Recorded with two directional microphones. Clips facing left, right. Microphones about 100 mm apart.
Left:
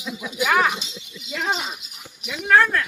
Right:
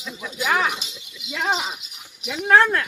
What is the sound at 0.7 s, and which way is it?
Speech, 25° left (ahead or behind).